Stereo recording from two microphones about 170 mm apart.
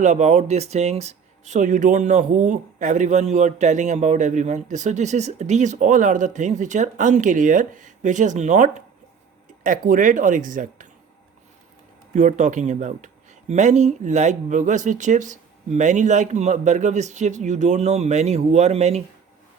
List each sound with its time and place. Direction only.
0.0 s speech: 45° right (ahead or behind)
12.1 s speech: 45° right (ahead or behind)